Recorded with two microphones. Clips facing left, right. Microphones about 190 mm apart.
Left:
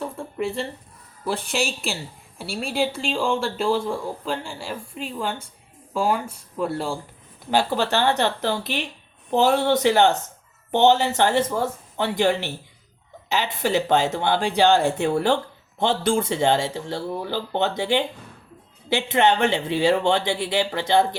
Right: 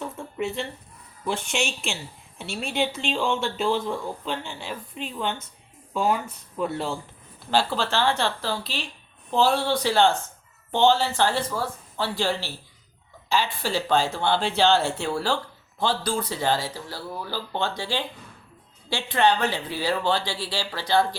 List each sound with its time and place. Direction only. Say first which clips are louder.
0.3 s speech: left 2 dB; centre (ahead or behind)
1.4 s a woman's voice: left 2 dB; 35° left (ahead or behind)
1.6 s speech: left 2 dB; centre (ahead or behind)
7.5 s speech: left 3 dB; 15° left (ahead or behind)